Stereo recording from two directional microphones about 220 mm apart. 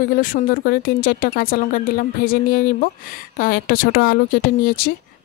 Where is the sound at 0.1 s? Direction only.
40° left (ahead or behind).